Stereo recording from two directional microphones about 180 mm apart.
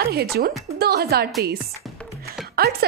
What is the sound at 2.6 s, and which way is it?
Speech, 55° right (ahead or behind).